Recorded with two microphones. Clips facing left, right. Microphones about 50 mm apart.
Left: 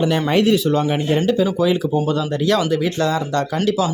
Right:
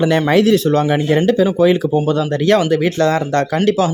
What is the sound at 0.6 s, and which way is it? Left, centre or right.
Speech, right.